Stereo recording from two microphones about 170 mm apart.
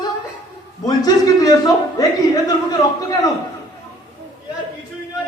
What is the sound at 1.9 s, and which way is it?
Speech, 25° left (ahead or behind).